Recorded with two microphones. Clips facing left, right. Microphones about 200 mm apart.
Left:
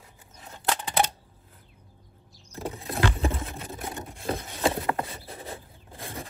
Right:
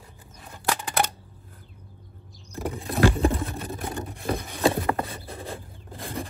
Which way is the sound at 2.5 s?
20° left (ahead or behind).